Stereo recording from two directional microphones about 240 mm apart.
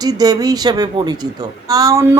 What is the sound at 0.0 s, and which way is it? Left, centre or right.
Speech, centre.